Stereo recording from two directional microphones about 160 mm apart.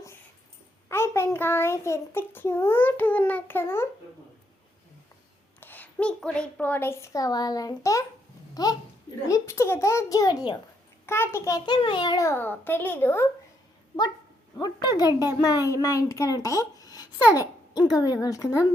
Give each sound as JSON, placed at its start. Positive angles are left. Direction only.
{"t": 0.9, "sound": "a child's voice", "side_deg": 15}
{"t": 5.5, "sound": "a child's voice", "side_deg": 10}
{"t": 11.0, "sound": "a child's voice", "side_deg": 15}
{"t": 14.6, "sound": "a child's voice", "side_deg": 25}